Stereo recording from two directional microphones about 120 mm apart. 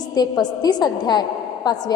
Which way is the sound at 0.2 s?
35° left (ahead or behind).